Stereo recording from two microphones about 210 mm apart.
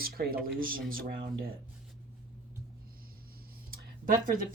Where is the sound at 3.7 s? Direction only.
40° right (ahead or behind).